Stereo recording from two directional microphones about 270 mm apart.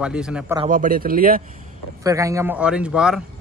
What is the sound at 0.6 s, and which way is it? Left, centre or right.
Speech, right.